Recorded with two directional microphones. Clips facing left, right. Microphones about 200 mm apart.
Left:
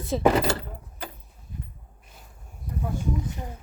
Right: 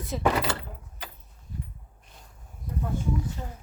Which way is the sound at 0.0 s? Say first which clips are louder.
Left 5 dB; 30° left (ahead or behind).